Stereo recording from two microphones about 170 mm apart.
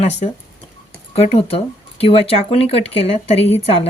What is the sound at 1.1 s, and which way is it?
Speech, 35° left (ahead or behind).